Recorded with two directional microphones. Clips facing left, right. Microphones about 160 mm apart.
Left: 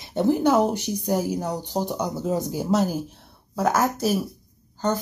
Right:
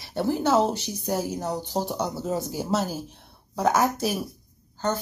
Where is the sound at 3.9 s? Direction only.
5° left (ahead or behind).